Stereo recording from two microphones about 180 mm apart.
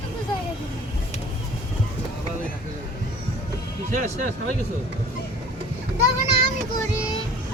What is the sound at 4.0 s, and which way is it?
Speech, 45° right (ahead or behind).